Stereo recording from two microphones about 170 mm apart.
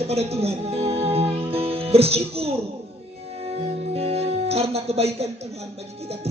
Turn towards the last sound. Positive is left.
turn(degrees=-35)  # may be behind; listen again after turning